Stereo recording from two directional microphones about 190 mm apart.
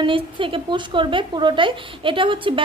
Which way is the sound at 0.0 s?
25° right (ahead or behind).